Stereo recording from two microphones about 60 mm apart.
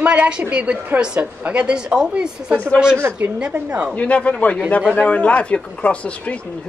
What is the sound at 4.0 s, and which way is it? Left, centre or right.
A man's voice, left.